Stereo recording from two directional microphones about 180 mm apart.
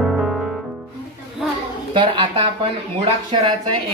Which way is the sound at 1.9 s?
25° right (ahead or behind).